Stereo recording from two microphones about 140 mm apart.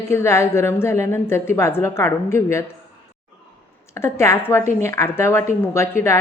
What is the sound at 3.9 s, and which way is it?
A woman's voice, 20° left (ahead or behind).